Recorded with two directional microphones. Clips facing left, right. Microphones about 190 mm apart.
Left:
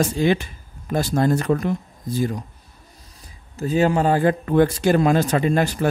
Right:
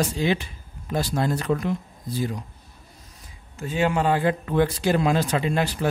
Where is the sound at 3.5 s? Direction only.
40° left (ahead or behind).